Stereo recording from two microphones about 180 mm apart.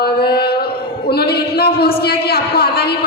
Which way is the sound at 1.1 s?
60° left (ahead or behind).